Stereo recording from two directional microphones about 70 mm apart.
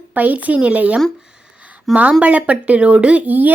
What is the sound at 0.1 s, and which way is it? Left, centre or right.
A woman's voice, right.